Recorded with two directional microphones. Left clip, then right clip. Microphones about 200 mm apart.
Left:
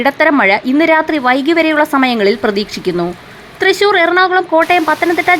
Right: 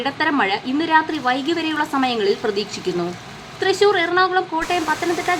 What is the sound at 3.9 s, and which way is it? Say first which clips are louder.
Speech: left 7 dB; 35° left (ahead or behind).